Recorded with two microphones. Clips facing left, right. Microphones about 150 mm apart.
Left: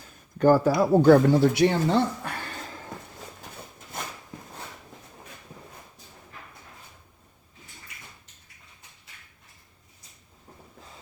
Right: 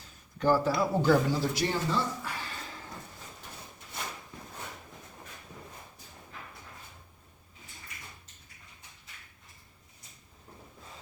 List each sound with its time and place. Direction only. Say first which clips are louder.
0.3 s speech: left 7 dB; 50° left (ahead or behind)